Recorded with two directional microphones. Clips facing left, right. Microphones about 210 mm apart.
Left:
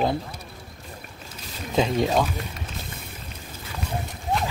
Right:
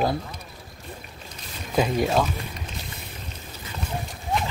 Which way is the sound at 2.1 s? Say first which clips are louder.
Even; 5° left (ahead or behind).